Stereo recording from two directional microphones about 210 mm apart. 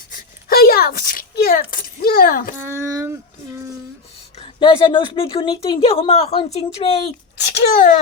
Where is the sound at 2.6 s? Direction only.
15° right (ahead or behind).